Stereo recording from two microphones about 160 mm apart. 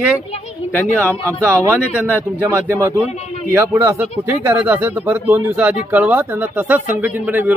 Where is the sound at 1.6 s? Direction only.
10° right (ahead or behind).